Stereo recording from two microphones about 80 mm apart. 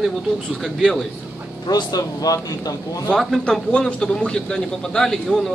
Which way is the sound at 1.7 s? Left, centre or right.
Left.